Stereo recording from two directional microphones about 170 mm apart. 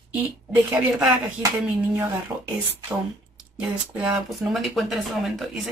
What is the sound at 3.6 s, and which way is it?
Speech, 5° right (ahead or behind).